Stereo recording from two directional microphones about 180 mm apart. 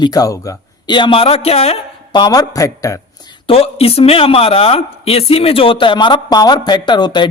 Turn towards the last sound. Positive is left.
turn(degrees=25)  # may be behind; listen again after turning